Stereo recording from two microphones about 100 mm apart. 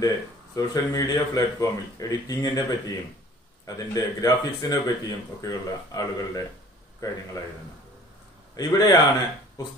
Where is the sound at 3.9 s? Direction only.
35° left (ahead or behind).